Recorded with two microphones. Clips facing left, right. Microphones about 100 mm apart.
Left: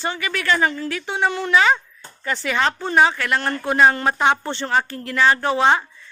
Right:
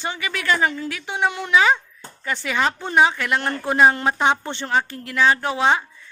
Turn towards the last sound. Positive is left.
turn(degrees=-5)  # may be behind; listen again after turning